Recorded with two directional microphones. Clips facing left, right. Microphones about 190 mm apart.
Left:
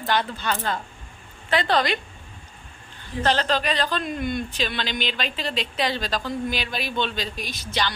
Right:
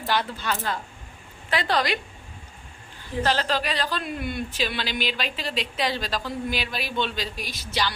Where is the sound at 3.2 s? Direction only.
5° right (ahead or behind).